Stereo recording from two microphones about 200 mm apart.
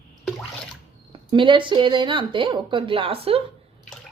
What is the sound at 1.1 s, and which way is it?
Speech, 25° right (ahead or behind).